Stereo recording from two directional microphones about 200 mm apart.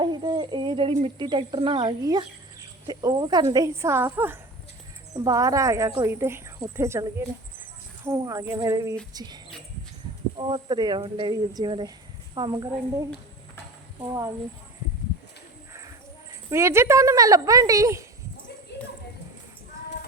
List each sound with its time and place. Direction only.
0.0 s a woman's voice: 20° right (ahead or behind)
14.0 s a woman's voice: 20° right (ahead or behind)
16.5 s a woman's voice: 15° right (ahead or behind)
18.7 s a sound: 60° left (ahead or behind)